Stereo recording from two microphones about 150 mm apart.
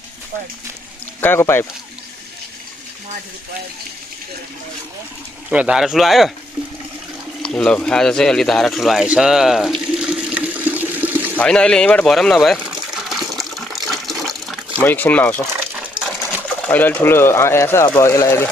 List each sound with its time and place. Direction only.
1.2 s speech: 15° left (ahead or behind)
5.5 s speech: 5° right (ahead or behind)
7.4 s bird: 5° left (ahead or behind); by 11.3 s 10° right (ahead or behind)
11.3 s water: 5° left (ahead or behind)
14.8 s speech: 15° left (ahead or behind)
16.6 s speech: 10° left (ahead or behind)